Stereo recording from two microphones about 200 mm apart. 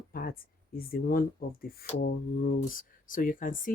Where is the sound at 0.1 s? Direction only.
45° left (ahead or behind).